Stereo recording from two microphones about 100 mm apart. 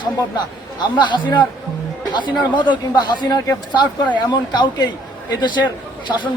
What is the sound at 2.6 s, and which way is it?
Speech, 45° left (ahead or behind).